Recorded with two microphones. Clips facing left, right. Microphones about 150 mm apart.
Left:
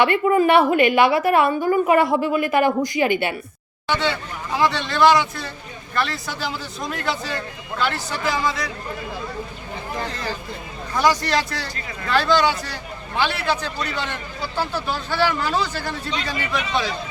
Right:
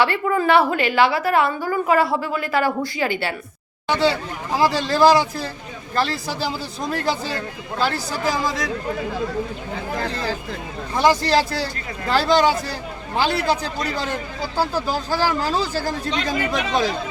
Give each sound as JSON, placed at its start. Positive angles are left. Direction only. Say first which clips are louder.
{"t": 0.0, "sound": "a woman's voice", "louder": "left 3 dB", "side_deg": 20}
{"t": 3.8, "sound": "a man's voice", "louder": "right 3 dB", "side_deg": -35}
{"t": 9.7, "sound": "speech", "louder": "right 2 dB", "side_deg": -90}
{"t": 10.9, "sound": "a man's voice", "louder": "right 2 dB", "side_deg": -25}